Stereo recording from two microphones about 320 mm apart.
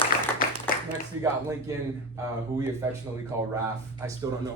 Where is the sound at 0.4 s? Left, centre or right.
Left.